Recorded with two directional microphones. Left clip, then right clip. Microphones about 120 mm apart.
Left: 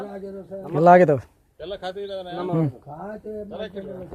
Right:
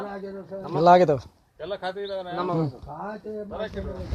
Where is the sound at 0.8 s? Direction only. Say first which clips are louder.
Left 3 dB; 90° left.